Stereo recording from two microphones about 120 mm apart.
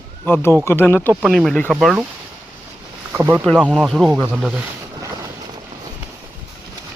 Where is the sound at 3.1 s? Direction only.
15° right (ahead or behind).